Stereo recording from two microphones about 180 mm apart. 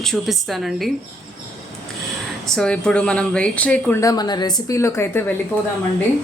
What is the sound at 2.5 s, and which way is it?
Speech, 5° left (ahead or behind).